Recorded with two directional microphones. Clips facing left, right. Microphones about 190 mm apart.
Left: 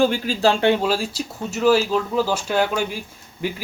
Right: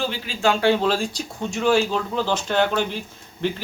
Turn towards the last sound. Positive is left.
turn(degrees=10)  # may be behind; listen again after turning